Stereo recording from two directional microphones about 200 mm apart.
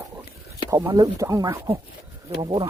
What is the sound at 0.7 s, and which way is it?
Speech, 15° right (ahead or behind).